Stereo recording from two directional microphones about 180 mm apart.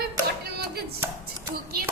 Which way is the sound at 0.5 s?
60° right (ahead or behind).